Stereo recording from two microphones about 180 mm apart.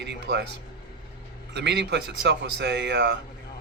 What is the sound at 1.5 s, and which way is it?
Speech, 70° right (ahead or behind).